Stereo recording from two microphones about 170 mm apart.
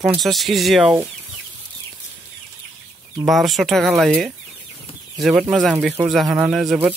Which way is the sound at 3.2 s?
Centre (ahead or behind).